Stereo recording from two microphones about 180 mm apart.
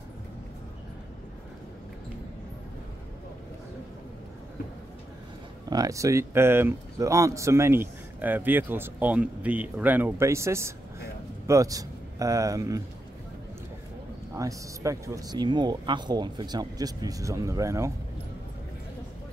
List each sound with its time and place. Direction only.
5.7 s speech: 20° right (ahead or behind)
14.3 s a man's voice: 15° right (ahead or behind)